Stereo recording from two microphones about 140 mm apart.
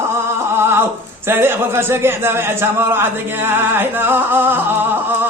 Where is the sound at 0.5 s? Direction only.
15° right (ahead or behind).